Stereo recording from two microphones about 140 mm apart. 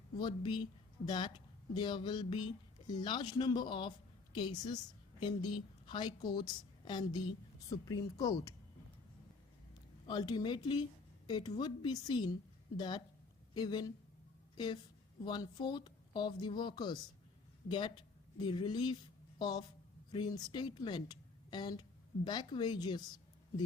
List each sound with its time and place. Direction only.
0.2 s a woman's voice: 30° left (ahead or behind)
10.1 s a woman's voice: 35° left (ahead or behind)